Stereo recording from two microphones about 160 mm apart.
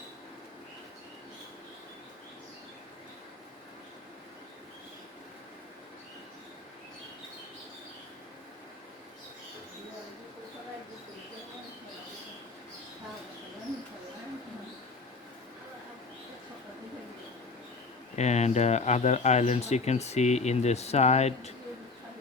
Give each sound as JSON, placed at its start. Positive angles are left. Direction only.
{"t": 18.2, "sound": "speech", "side_deg": 45}